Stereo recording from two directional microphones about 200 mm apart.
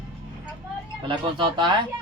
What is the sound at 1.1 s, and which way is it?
Speech, 25° right (ahead or behind).